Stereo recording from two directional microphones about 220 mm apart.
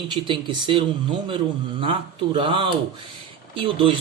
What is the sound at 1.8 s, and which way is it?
Speech, 25° right (ahead or behind).